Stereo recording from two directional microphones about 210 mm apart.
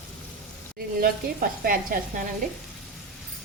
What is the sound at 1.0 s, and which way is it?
Speech, 40° right (ahead or behind).